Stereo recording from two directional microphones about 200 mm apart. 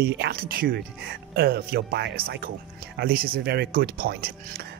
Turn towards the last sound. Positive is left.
turn(degrees=-50)  # may be behind; listen again after turning